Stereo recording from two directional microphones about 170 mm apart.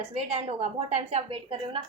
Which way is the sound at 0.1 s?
35° right (ahead or behind).